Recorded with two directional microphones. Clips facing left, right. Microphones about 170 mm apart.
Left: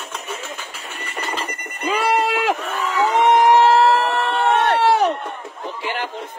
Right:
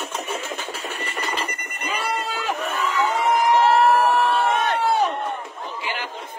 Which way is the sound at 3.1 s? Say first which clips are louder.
Left 7 dB; 75° left (ahead or behind).